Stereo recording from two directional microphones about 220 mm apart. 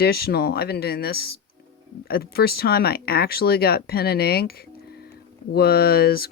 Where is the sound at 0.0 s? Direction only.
45° left (ahead or behind).